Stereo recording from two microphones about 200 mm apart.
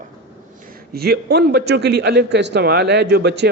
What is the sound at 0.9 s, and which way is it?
A man's voice, 55° right (ahead or behind).